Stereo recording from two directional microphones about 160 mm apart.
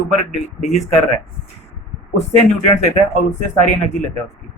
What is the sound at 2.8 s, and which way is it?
Speech, 45° left (ahead or behind).